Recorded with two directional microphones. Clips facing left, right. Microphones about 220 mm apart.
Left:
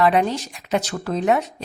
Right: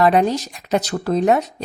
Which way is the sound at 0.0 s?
40° right (ahead or behind).